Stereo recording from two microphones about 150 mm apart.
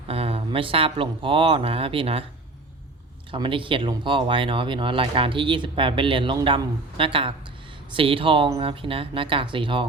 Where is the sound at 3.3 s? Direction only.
35° right (ahead or behind).